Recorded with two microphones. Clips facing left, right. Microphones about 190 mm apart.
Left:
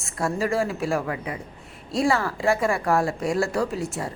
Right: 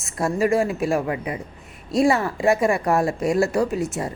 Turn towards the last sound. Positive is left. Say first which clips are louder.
# right 4 dB
turn(degrees=-20)  # may be behind; listen again after turning